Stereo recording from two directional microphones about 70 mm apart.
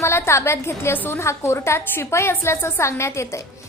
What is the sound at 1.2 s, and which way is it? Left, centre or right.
A woman's voice, left.